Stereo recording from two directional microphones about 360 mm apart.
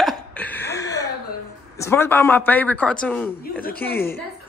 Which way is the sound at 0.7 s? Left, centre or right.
Centre.